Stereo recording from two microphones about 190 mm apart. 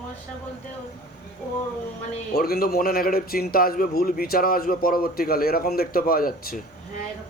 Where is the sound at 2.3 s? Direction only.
55° left (ahead or behind).